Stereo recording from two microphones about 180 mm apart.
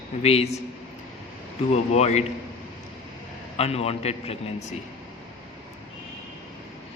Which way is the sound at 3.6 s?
35° left (ahead or behind).